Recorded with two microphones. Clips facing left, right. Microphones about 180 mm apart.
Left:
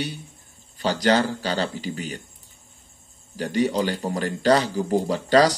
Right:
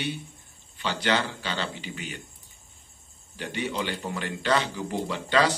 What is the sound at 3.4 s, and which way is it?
A man's voice, 40° left (ahead or behind).